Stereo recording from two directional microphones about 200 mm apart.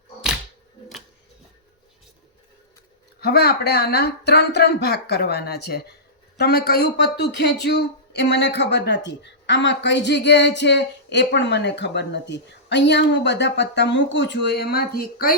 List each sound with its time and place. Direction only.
3.2 s a man's voice: 55° left (ahead or behind)